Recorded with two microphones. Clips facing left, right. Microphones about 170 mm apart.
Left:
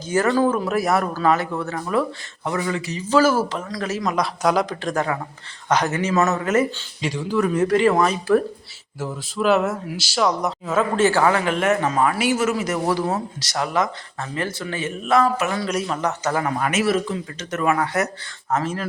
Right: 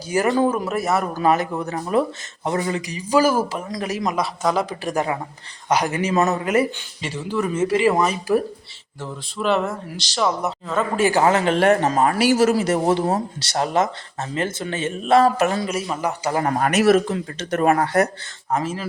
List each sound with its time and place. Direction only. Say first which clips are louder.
0.1 s speech: even; 15° right (ahead or behind)
0.7 s speech: left 1 dB; centre (ahead or behind)
1.1 s speech: right 1 dB; 20° right (ahead or behind)
2.8 s speech: left 1 dB; 10° right (ahead or behind)
4.2 s speech: left 3 dB; centre (ahead or behind)
7.0 s speech: left 3 dB; centre (ahead or behind)
9.0 s speech: left 3 dB; 5° left (ahead or behind)
10.9 s speech: even; 10° right (ahead or behind)
11.2 s speech: right 2 dB; 25° right (ahead or behind)
15.6 s speech: left 1 dB; 5° right (ahead or behind)
16.5 s speech: right 7 dB; 45° right (ahead or behind)
17.3 s speech: right 3 dB; 30° right (ahead or behind)
18.5 s speech: even; 5° right (ahead or behind)